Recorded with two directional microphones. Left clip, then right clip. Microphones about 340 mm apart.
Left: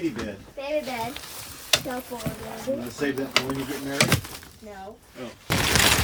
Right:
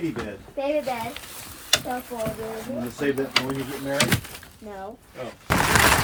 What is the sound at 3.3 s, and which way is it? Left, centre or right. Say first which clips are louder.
Speech: right 1 dB; centre.